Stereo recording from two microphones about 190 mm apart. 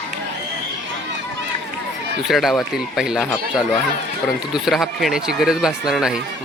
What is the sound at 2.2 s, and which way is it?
Speech, centre (ahead or behind).